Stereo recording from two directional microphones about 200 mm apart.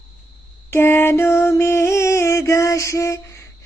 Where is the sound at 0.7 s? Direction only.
10° left (ahead or behind).